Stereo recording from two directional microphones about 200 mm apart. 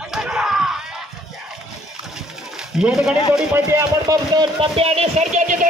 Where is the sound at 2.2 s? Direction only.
5° right (ahead or behind).